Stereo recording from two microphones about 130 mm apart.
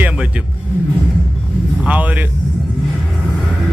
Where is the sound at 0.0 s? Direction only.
10° right (ahead or behind).